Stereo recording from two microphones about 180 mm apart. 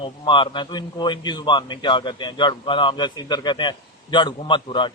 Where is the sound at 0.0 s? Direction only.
25° left (ahead or behind).